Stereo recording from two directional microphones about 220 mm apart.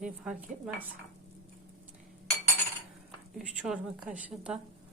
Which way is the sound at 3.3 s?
5° right (ahead or behind).